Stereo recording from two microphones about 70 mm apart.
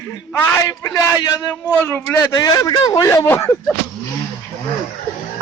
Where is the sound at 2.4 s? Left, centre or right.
Left.